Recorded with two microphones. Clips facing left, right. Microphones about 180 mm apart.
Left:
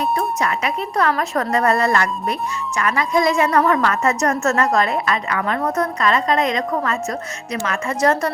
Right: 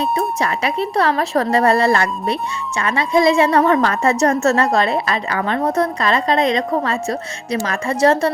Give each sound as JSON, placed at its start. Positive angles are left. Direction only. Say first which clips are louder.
{"t": 0.0, "sound": "speech", "louder": "right 1 dB", "side_deg": -30}